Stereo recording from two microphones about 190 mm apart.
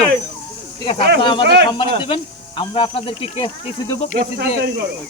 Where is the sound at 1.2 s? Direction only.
25° left (ahead or behind).